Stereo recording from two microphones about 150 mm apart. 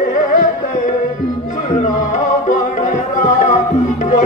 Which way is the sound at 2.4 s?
55° left (ahead or behind).